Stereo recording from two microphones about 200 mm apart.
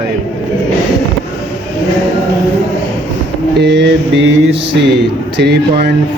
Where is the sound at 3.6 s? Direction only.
55° right (ahead or behind).